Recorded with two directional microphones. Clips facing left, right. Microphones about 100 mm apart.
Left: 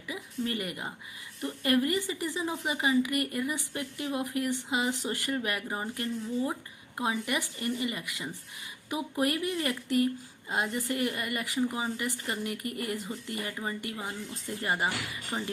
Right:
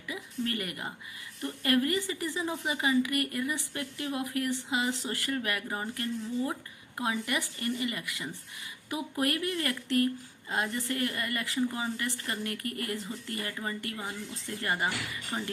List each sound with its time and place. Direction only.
0.1 s a woman's voice: 20° left (ahead or behind)